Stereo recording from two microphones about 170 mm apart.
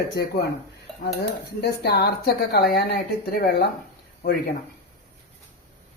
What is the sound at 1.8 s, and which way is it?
A woman's voice, 70° left (ahead or behind).